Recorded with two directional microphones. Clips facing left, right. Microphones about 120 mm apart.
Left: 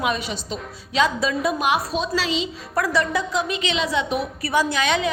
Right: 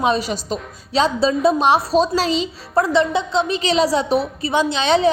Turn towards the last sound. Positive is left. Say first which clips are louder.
# right 6 dB
turn(degrees=-30)  # may be behind; listen again after turning